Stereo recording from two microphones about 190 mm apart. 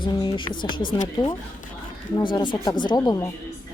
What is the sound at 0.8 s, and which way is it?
Speech, 45° left (ahead or behind).